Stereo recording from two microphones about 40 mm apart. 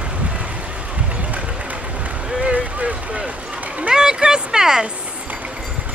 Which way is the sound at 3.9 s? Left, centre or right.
Centre.